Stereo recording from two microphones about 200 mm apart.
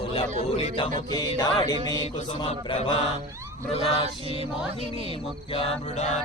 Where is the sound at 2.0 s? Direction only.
35° left (ahead or behind).